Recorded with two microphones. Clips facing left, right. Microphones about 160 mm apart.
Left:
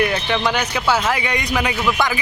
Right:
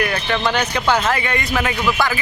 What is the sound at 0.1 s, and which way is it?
Speech, 10° left (ahead or behind).